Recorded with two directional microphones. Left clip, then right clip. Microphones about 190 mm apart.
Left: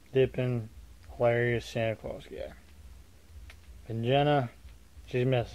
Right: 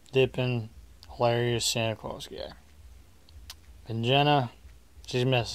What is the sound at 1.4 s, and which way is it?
Speech, 20° right (ahead or behind).